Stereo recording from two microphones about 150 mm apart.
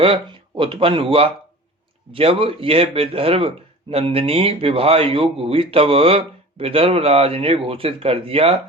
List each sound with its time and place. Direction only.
0.0 s speech: 35° right (ahead or behind)